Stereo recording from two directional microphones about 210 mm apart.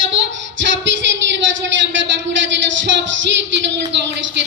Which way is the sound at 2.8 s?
60° right (ahead or behind).